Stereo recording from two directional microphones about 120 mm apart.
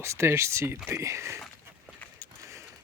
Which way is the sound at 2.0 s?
15° left (ahead or behind).